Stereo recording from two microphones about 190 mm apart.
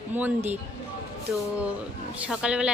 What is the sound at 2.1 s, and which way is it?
Speech, 5° right (ahead or behind).